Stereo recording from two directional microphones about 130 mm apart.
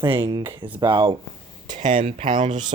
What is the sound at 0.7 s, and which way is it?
Speech, 40° right (ahead or behind).